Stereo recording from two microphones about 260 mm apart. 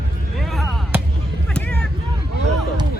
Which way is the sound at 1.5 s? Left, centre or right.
Centre.